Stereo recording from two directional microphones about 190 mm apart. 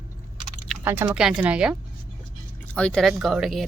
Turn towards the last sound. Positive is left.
turn(degrees=0)  # may be behind; listen again after turning